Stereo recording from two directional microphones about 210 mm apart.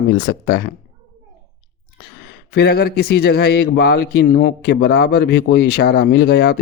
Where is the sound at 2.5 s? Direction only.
50° left (ahead or behind).